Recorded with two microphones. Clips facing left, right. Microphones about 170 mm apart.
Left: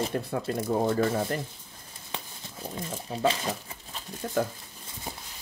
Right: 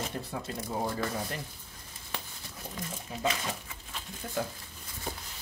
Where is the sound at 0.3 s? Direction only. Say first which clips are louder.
Left 8 dB; 55° left (ahead or behind).